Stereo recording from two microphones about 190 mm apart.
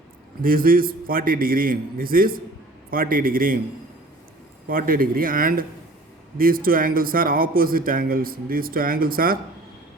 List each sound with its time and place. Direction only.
0.4 s a man's voice: 50° right (ahead or behind)
4.7 s a man's voice: 50° right (ahead or behind)